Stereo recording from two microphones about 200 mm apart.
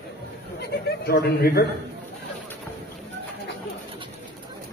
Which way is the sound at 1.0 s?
50° left (ahead or behind).